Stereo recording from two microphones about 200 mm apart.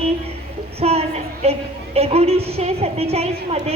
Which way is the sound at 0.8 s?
30° right (ahead or behind).